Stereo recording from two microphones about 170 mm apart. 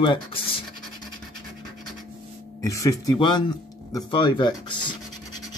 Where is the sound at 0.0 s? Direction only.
30° left (ahead or behind).